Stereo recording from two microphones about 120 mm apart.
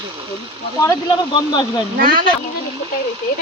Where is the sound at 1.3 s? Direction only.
35° left (ahead or behind).